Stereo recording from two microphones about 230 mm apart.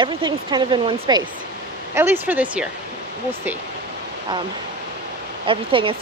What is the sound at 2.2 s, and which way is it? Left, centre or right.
Speech, centre.